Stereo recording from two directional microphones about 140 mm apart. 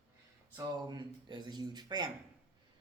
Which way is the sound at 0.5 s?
30° right (ahead or behind).